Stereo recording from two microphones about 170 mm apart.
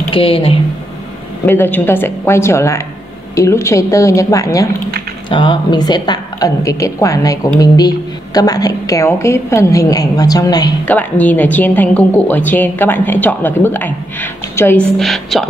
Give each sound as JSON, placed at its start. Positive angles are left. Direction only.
{"t": 0.1, "sound": "a woman's voice", "side_deg": 35}
{"t": 1.4, "sound": "a woman's voice", "side_deg": 10}
{"t": 10.9, "sound": "a woman's voice", "side_deg": 10}
{"t": 15.0, "sound": "speech", "side_deg": 0}